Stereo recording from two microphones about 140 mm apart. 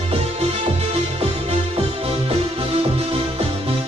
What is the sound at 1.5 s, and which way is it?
Music, 45° right (ahead or behind).